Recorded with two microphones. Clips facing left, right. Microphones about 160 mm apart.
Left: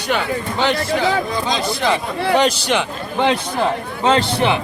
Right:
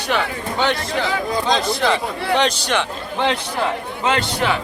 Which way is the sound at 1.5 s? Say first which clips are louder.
Right 2 dB; 10° left (ahead or behind).